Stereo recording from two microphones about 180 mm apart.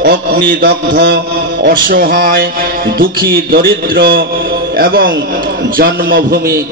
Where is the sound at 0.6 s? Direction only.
65° right (ahead or behind).